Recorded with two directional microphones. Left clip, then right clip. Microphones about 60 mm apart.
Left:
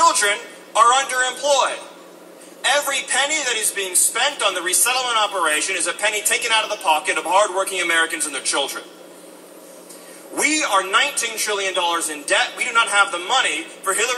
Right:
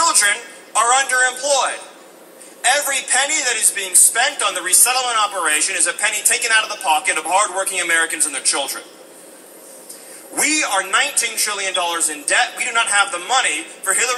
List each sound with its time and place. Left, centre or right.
0.3 s a man's voice: right
7.9 s a man's voice: right
10.3 s a man's voice: right